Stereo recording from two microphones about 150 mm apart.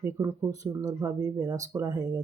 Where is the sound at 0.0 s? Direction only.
20° right (ahead or behind).